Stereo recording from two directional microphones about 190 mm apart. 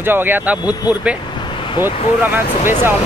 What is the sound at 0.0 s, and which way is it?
Speech, 10° right (ahead or behind).